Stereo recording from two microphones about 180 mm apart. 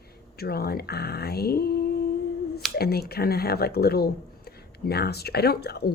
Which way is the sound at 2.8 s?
60° left (ahead or behind).